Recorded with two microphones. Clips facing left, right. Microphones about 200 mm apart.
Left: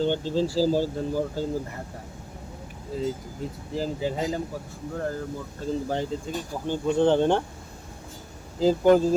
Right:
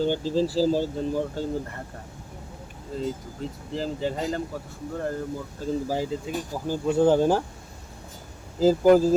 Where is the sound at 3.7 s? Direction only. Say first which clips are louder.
Even; 10° left (ahead or behind).